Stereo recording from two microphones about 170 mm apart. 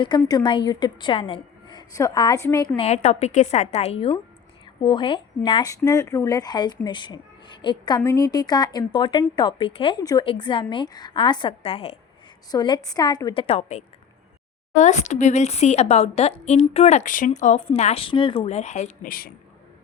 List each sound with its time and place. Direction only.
0.0 s speech: 25° left (ahead or behind)
2.7 s speech: 40° left (ahead or behind)
19.0 s speech: 60° left (ahead or behind)